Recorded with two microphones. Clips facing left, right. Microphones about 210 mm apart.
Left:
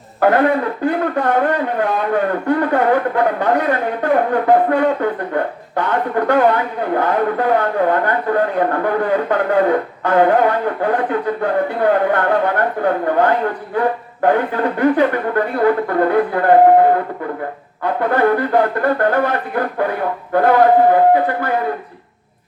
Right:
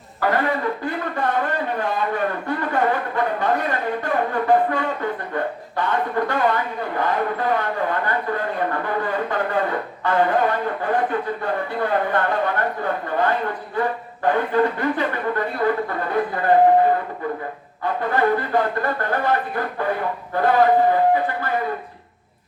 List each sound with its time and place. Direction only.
0.2 s speech: 55° left (ahead or behind)